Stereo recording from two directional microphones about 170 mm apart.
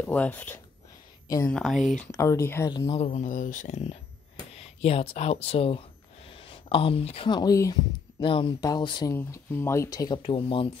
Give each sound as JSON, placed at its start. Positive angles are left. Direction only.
{"t": 0.0, "sound": "speech", "side_deg": 10}
{"t": 2.0, "sound": "speech", "side_deg": 15}
{"t": 2.9, "sound": "speech", "side_deg": 40}
{"t": 9.1, "sound": "speech", "side_deg": 15}
{"t": 9.9, "sound": "speech", "side_deg": 25}